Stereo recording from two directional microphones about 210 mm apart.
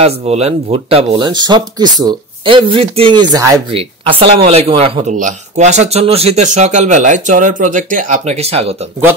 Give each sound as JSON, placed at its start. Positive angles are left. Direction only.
{"t": 0.0, "sound": "speech", "side_deg": -30}